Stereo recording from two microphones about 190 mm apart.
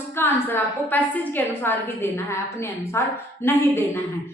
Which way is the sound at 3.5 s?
15° left (ahead or behind).